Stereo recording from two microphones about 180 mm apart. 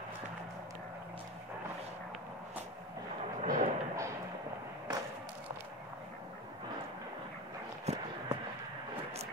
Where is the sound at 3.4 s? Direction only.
40° right (ahead or behind).